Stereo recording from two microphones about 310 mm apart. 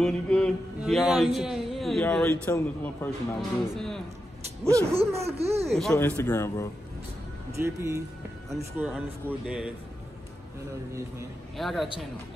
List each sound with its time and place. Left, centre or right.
0.0 s mantra: centre
4.7 s speech: centre
5.4 s speech: centre
5.7 s a man's voice: centre
7.5 s speech: centre
8.7 s mantra: centre
9.2 s speech: centre
11.0 s mantra: centre